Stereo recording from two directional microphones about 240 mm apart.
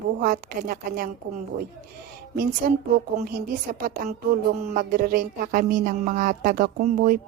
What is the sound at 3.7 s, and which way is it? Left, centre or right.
Speech, right.